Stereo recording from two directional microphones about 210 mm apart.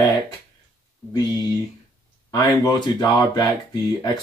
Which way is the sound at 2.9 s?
20° left (ahead or behind).